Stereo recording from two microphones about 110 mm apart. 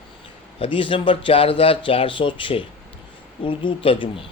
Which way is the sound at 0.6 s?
50° left (ahead or behind).